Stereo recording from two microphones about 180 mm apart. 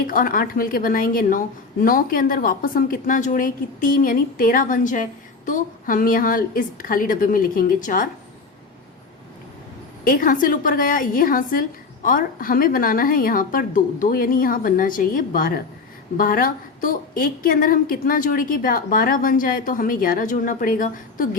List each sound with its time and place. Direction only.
0.1 s a woman's voice: 50° left (ahead or behind)
10.0 s a woman's voice: 50° left (ahead or behind)